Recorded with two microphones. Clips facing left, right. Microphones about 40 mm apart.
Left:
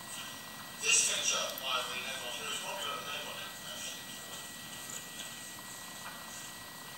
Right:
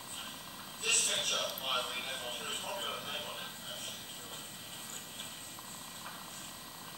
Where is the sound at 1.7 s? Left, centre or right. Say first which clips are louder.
Left 1 dB; centre.